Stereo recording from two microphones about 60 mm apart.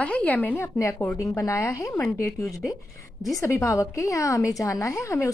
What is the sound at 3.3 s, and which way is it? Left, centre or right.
A woman's voice, left.